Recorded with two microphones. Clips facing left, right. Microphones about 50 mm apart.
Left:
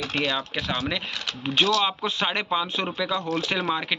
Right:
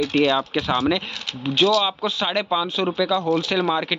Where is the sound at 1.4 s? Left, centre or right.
Left.